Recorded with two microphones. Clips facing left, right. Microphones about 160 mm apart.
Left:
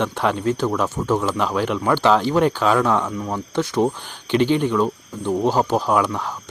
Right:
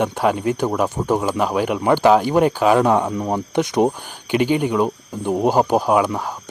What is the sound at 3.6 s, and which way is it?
Speech, 15° right (ahead or behind).